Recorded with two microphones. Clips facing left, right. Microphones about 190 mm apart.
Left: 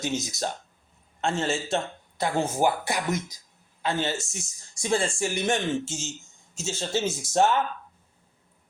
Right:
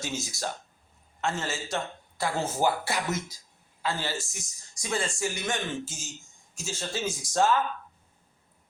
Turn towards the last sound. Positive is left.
turn(degrees=25)  # may be behind; listen again after turning